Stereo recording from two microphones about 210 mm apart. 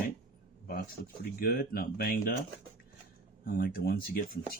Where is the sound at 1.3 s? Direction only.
45° left (ahead or behind).